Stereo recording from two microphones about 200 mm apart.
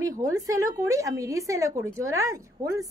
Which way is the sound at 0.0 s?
15° right (ahead or behind).